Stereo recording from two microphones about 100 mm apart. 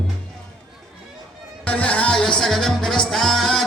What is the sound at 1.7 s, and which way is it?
Music, 15° left (ahead or behind).